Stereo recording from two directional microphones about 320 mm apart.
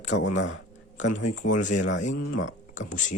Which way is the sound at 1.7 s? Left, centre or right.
Left.